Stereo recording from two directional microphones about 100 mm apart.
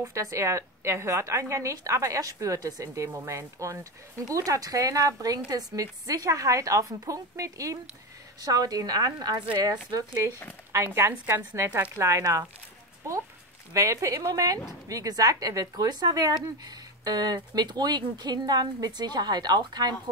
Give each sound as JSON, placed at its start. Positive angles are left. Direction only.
{"t": 0.0, "sound": "a woman's voice", "side_deg": -30}
{"t": 10.7, "sound": "a woman's voice", "side_deg": -25}
{"t": 13.7, "sound": "a woman's voice", "side_deg": -30}